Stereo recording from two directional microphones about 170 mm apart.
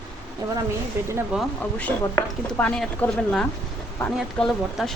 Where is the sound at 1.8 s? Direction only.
10° left (ahead or behind).